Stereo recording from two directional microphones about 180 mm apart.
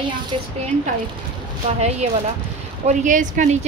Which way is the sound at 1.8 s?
35° right (ahead or behind).